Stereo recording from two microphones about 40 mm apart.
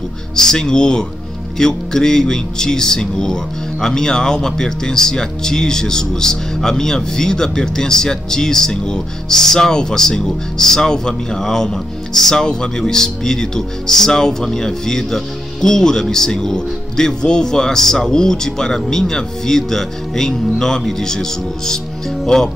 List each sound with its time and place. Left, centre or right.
0.4 s speech: centre